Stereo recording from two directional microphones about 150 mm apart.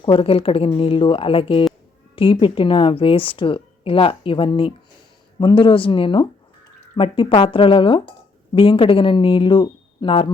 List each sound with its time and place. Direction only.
0.0 s a woman's voice: 35° left (ahead or behind)